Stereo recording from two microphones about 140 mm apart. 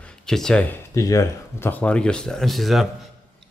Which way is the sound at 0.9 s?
25° left (ahead or behind).